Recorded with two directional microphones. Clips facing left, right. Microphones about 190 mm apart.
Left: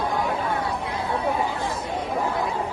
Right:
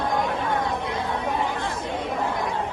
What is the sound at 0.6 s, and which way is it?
Chatter, 20° right (ahead or behind).